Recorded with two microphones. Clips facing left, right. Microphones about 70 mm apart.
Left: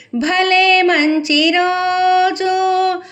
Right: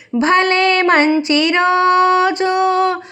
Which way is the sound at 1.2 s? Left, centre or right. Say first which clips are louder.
Even; right.